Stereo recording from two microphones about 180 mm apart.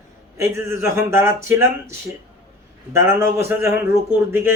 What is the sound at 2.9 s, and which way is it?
Speech, 15° right (ahead or behind).